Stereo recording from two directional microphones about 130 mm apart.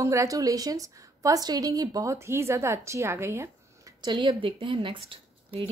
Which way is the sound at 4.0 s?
35° right (ahead or behind).